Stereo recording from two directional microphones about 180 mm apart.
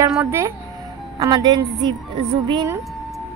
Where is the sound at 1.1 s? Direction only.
20° right (ahead or behind).